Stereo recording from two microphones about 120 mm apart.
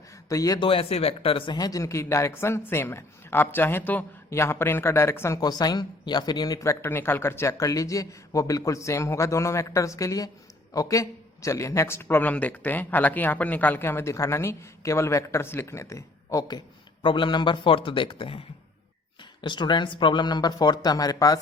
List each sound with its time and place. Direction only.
0.3 s a man's voice: 30° left (ahead or behind)
0.6 s a man's voice: 50° left (ahead or behind)
1.5 s a man's voice: 30° left (ahead or behind)
17.0 s a man's voice: 40° left (ahead or behind)